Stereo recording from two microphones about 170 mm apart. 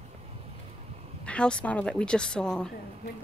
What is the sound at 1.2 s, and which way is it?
A woman's voice, 5° left (ahead or behind).